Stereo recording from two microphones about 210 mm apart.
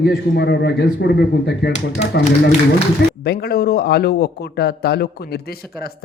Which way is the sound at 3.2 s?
50° left (ahead or behind).